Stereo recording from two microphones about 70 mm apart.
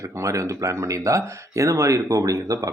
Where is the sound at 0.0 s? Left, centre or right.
Right.